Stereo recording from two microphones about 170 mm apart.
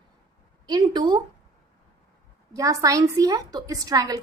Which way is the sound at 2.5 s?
20° right (ahead or behind).